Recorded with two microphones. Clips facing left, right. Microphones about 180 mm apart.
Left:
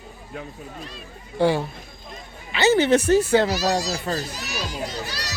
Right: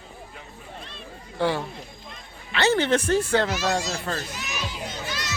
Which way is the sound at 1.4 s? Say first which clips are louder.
Left 5 dB; 15° left (ahead or behind).